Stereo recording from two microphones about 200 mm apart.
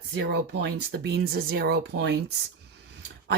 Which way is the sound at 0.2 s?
55° right (ahead or behind).